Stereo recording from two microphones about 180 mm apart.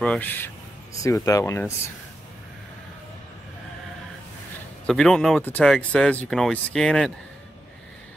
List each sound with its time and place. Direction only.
0.0 s speech: 10° left (ahead or behind)
4.8 s speech: 5° left (ahead or behind)